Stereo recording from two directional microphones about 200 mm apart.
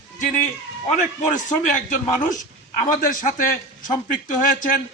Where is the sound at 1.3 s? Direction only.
40° left (ahead or behind).